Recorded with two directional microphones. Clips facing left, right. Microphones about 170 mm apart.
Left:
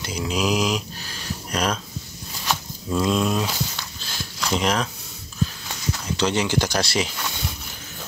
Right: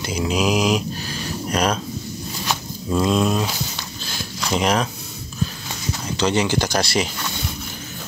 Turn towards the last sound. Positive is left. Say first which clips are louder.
# right 2 dB
turn(degrees=0)  # may be behind; listen again after turning